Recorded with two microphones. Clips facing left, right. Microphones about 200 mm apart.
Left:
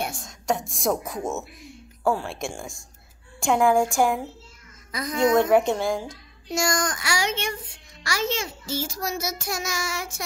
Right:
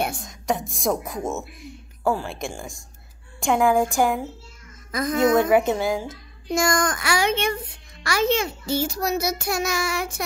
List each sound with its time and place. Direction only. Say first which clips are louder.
0.2 s a woman's voice: right 1 dB; centre (ahead or behind)
4.9 s speech: right 2 dB; 50° right (ahead or behind)
5.3 s a woman's voice: left 2 dB; 5° right (ahead or behind)
6.5 s a child's voice: right 4 dB; 55° right (ahead or behind)